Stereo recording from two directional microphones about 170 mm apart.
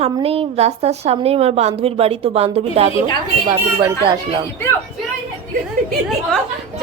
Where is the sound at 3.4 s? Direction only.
20° right (ahead or behind).